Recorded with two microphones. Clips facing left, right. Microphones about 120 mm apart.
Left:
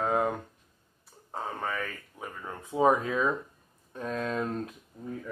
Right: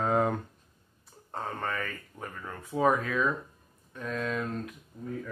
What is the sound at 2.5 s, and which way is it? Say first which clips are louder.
Speech: left 2 dB; 20° left (ahead or behind).